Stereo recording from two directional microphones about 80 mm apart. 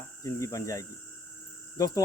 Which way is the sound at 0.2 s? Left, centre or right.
Left.